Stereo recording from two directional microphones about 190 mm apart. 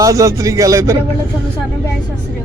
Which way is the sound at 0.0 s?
15° right (ahead or behind).